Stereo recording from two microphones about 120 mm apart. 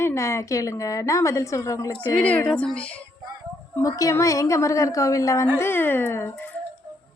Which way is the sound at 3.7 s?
25° left (ahead or behind).